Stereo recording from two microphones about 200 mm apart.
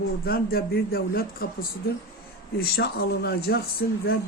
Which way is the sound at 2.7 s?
50° left (ahead or behind).